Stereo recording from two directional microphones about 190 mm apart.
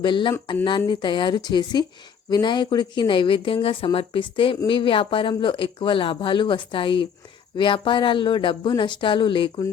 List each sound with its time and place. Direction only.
0.0 s speech: 25° left (ahead or behind)